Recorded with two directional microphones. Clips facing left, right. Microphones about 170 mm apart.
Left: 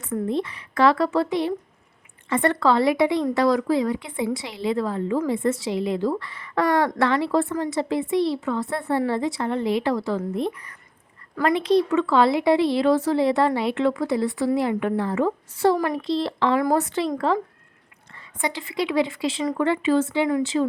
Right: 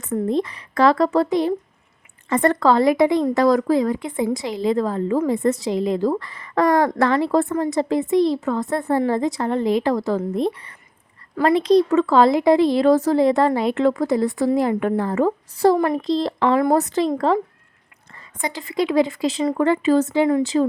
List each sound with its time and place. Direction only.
0.0 s a woman's voice: 40° right (ahead or behind)
10.4 s a woman's voice: 30° right (ahead or behind)
18.1 s a woman's voice: 45° right (ahead or behind)